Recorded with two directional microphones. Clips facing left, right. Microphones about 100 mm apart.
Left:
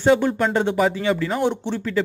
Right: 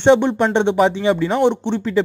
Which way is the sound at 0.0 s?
25° right (ahead or behind).